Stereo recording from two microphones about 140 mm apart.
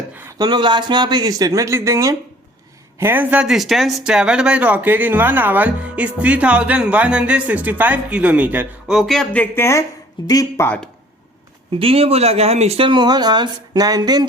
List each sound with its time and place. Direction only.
0.1 s a sound: 15° right (ahead or behind)
0.3 s speech: 30° right (ahead or behind); by 10.7 s 25° left (ahead or behind)
11.7 s speech: 40° right (ahead or behind)